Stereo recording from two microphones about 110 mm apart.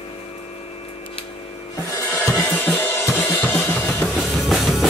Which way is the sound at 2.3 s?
15° left (ahead or behind).